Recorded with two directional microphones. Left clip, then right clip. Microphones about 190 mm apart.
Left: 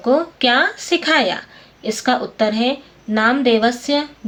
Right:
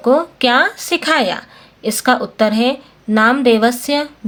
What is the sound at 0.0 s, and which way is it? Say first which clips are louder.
A woman's voice: right 3 dB; 40° right (ahead or behind).